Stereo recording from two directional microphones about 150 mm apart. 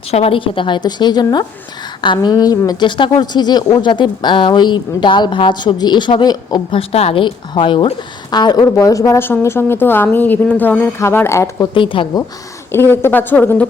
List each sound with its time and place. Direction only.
0.1 s a woman's voice: 40° left (ahead or behind)
6.7 s a woman's voice: 40° left (ahead or behind); by 11.7 s 20° left (ahead or behind)
11.7 s a woman's voice: 35° left (ahead or behind)
12.7 s a woman's voice: 15° left (ahead or behind)